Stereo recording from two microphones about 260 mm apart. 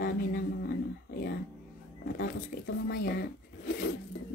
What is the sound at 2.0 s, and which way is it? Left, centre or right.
Speech, left.